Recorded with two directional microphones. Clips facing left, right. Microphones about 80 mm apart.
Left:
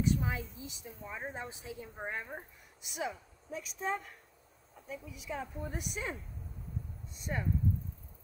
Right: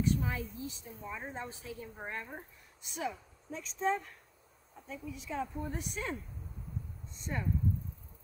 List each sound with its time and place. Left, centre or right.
0.0 s a woman's voice: centre